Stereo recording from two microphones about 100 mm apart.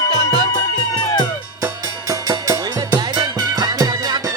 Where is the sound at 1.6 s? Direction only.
40° right (ahead or behind).